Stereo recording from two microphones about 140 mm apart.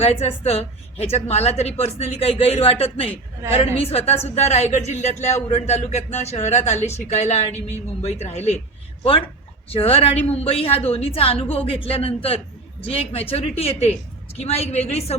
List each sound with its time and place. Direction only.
0.0 s speech: 45° left (ahead or behind)
9.6 s speech: 45° left (ahead or behind)